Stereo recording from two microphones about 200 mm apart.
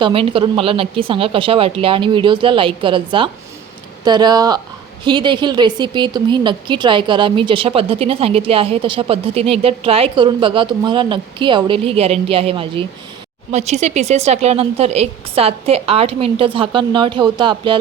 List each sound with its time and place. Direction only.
0.0 s speech: 25° right (ahead or behind)